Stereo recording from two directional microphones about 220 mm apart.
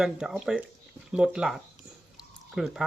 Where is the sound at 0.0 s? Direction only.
5° right (ahead or behind).